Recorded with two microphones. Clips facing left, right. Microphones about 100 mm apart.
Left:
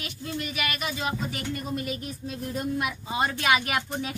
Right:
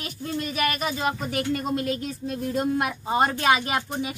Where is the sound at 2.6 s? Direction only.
55° right (ahead or behind).